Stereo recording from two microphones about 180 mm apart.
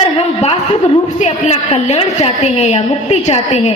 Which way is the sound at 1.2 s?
40° left (ahead or behind).